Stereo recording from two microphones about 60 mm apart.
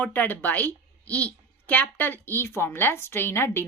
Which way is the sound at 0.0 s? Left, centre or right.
Left.